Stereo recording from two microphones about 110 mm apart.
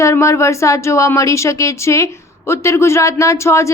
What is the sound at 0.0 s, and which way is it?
Speech, 25° left (ahead or behind).